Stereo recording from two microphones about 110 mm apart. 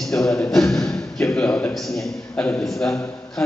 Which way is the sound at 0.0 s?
5° left (ahead or behind).